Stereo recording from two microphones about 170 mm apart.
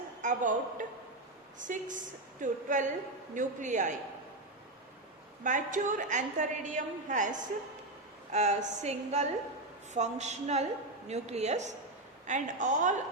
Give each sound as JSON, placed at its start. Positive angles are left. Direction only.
{"t": 0.2, "sound": "a woman's voice", "side_deg": -50}
{"t": 5.4, "sound": "a woman's voice", "side_deg": -50}